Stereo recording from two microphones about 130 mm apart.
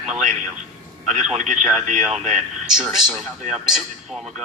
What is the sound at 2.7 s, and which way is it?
Speech, 5° right (ahead or behind).